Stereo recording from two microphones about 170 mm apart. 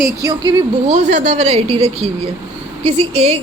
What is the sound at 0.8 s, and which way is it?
Speech, 45° right (ahead or behind).